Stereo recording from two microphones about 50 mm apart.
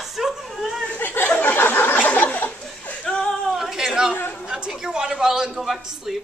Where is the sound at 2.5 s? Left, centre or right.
Left.